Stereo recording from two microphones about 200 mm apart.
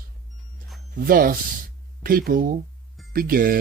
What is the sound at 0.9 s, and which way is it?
Speech, 45° right (ahead or behind).